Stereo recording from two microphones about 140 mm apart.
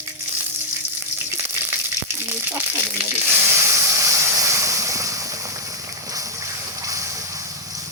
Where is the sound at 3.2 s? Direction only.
20° right (ahead or behind).